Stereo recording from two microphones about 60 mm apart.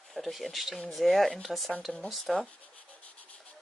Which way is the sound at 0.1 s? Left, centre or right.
Centre.